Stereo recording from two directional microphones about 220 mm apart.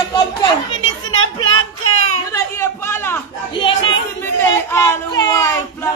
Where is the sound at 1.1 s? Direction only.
70° left (ahead or behind).